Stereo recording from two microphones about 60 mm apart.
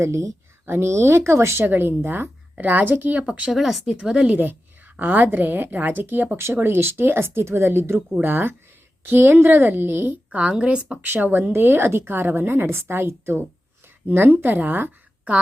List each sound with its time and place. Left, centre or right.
0.0 s speech: right
0.6 s speech: right
1.6 s a woman's voice: right
3.5 s a woman's voice: centre
4.9 s a woman's voice: right
10.2 s a woman's voice: right
11.0 s a woman's voice: right
14.1 s a woman's voice: right